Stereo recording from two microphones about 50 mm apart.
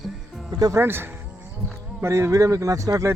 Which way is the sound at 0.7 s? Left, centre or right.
Right.